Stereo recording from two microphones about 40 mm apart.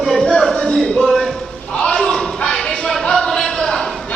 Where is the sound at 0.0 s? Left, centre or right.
Centre.